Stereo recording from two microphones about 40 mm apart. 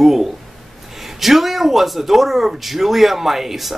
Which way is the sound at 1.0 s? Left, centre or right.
Centre.